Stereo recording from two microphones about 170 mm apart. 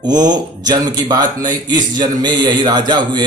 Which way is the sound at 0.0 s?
25° right (ahead or behind).